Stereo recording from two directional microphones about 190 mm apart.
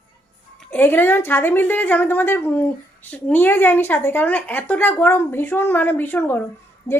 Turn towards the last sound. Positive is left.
turn(degrees=15)  # may be behind; listen again after turning